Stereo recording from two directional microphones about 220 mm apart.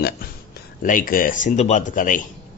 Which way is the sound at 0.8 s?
40° left (ahead or behind).